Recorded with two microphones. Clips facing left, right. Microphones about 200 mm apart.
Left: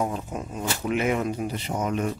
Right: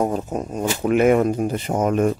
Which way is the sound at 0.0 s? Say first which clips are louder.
Right 6 dB; 40° right (ahead or behind).